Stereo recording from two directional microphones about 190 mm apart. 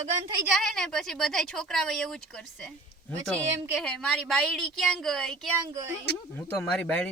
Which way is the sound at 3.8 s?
Centre (ahead or behind).